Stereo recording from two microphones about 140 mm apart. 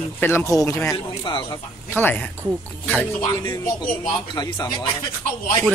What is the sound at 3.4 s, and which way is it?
A man's voice, 30° left (ahead or behind).